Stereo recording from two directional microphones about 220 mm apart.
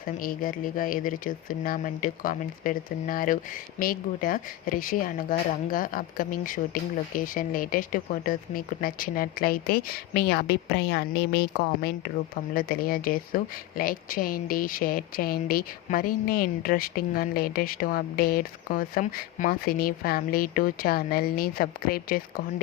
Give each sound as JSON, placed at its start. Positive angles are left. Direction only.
{"t": 0.2, "sound": "speech", "side_deg": 40}